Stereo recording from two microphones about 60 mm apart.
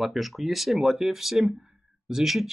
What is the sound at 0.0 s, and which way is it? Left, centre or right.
Speech, centre.